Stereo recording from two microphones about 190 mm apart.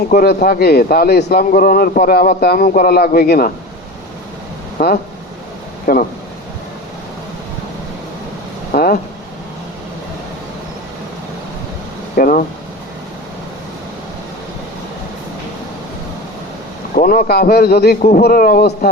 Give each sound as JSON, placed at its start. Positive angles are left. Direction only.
{"t": 0.1, "sound": "a man's voice", "side_deg": 50}
{"t": 5.8, "sound": "speech", "side_deg": 45}
{"t": 8.7, "sound": "vehicle", "side_deg": 50}
{"t": 12.1, "sound": "a sound", "side_deg": 45}
{"t": 16.9, "sound": "a man's voice", "side_deg": 45}